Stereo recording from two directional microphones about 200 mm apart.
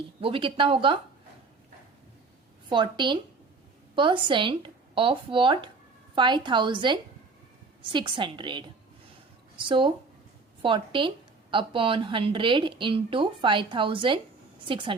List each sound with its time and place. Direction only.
0.2 s speech: 25° right (ahead or behind)
2.6 s speech: 25° right (ahead or behind)
9.6 s speech: 25° right (ahead or behind)